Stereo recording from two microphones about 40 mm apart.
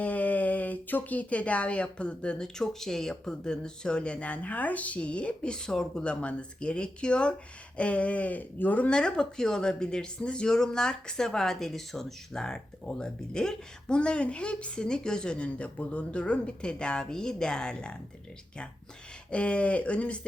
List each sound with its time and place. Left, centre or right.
0.0 s speech: left
8.9 s speech: left
19.3 s speech: left